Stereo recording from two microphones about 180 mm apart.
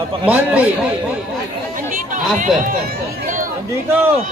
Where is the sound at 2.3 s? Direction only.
45° right (ahead or behind).